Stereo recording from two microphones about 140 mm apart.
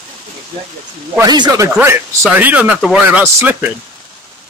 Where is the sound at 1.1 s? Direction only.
30° right (ahead or behind).